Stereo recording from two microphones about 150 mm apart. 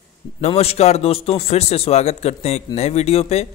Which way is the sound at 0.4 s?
40° left (ahead or behind).